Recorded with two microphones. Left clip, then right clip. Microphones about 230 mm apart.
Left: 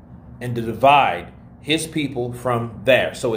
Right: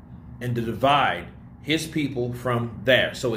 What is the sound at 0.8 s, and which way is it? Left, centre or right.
Speech, left.